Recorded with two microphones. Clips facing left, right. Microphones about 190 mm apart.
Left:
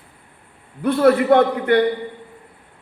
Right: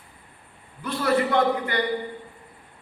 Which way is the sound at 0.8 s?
60° left (ahead or behind).